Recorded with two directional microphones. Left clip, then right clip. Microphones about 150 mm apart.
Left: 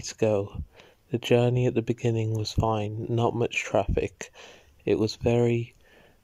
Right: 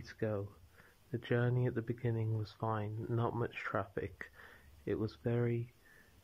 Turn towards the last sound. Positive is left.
turn(degrees=35)  # may be behind; listen again after turning